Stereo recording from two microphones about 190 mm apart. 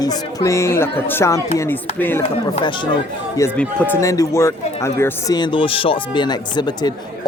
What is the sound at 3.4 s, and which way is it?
Speech, 5° left (ahead or behind).